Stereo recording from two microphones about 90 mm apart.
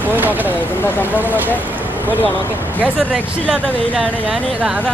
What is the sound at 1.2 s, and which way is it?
Speech, 20° right (ahead or behind).